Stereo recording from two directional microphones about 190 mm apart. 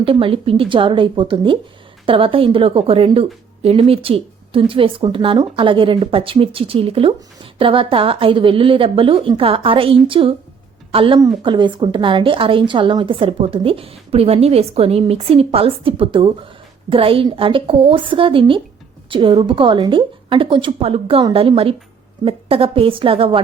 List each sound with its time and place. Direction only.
0.0 s speech: 30° right (ahead or behind)